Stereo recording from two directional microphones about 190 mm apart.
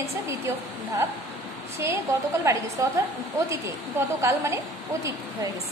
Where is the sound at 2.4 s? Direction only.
15° right (ahead or behind).